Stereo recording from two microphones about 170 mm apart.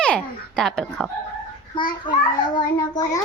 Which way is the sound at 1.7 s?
25° left (ahead or behind).